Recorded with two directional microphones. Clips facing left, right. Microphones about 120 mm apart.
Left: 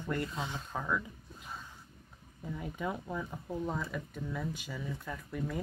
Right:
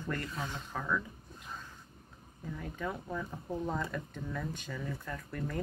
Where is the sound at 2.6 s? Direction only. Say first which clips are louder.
Left 1 dB; 15° left (ahead or behind).